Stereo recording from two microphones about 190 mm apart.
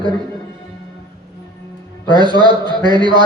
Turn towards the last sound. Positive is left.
turn(degrees=-25)  # may be behind; listen again after turning